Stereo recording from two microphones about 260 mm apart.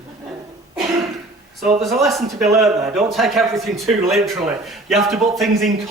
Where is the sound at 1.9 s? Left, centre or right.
Centre.